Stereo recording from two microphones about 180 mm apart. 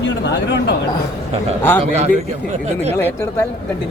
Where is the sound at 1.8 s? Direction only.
35° right (ahead or behind).